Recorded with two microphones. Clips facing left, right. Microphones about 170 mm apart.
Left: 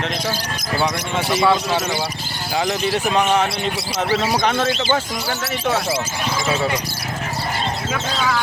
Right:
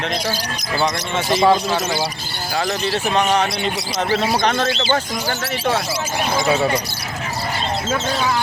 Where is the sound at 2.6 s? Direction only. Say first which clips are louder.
Left 1 dB; 15° left (ahead or behind).